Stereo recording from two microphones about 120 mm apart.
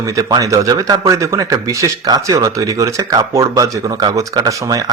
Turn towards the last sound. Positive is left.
turn(degrees=-30)  # may be behind; listen again after turning